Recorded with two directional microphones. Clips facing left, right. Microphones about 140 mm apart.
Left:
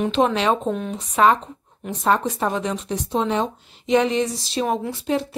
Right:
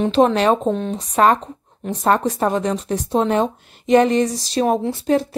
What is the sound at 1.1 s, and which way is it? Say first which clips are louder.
A woman's voice: right 1 dB; 45° right (ahead or behind).